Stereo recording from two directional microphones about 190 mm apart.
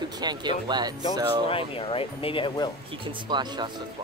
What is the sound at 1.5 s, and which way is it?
A woman's voice, 30° left (ahead or behind).